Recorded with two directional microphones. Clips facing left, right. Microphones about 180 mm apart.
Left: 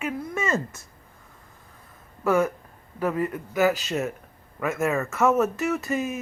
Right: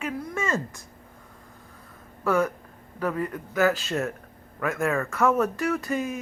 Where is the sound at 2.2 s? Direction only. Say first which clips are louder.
Left 2 dB; 10° left (ahead or behind).